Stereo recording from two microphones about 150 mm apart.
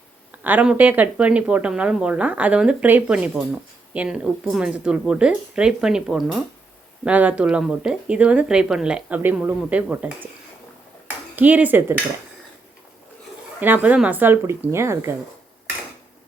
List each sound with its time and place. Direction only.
0.3 s speech: 10° right (ahead or behind)
11.3 s speech: 10° right (ahead or behind)
13.6 s speech: 10° right (ahead or behind)